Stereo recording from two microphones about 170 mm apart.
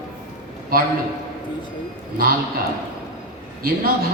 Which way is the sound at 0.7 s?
60° right (ahead or behind).